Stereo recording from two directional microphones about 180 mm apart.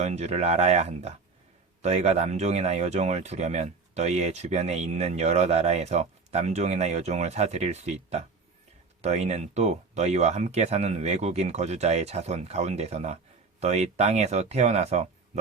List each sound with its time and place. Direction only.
0.0 s speech: 40° right (ahead or behind)